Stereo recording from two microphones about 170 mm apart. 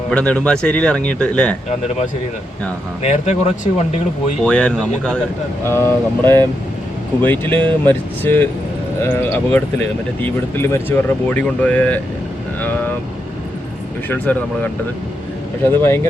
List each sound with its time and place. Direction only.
0.1 s speech: 10° left (ahead or behind)
3.0 s speech: 40° left (ahead or behind)
4.4 s speech: 5° left (ahead or behind)
14.1 s speech: 10° left (ahead or behind)